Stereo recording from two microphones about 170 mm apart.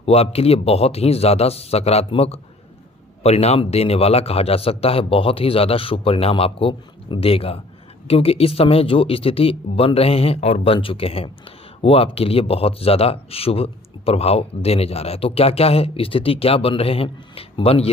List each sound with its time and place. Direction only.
0.0 s speech: 35° left (ahead or behind)